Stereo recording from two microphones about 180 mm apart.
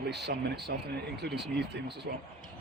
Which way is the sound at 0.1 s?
70° right (ahead or behind).